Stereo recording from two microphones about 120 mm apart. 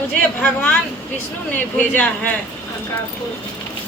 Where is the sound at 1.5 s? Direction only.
15° left (ahead or behind).